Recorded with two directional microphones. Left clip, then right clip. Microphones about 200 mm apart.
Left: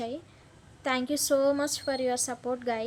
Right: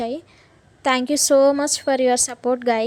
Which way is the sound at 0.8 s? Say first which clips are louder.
Right 10 dB; 40° right (ahead or behind).